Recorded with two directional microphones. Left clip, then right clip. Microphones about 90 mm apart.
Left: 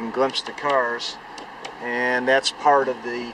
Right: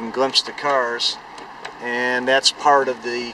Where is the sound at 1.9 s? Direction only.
5° right (ahead or behind).